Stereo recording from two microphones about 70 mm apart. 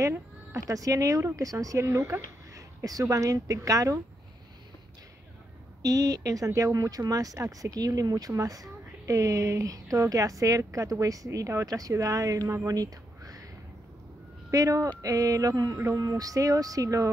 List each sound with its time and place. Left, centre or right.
0.1 s a woman's voice: right
2.8 s speech: right
5.9 s a woman's voice: right
12.6 s a sound: right
14.5 s speech: right
15.7 s a woman's voice: right
16.0 s speech: right